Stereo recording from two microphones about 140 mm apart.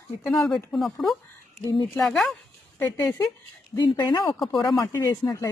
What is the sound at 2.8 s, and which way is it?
Speech, 20° left (ahead or behind).